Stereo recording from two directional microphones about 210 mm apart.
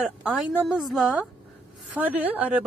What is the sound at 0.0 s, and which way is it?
Speech, 5° right (ahead or behind).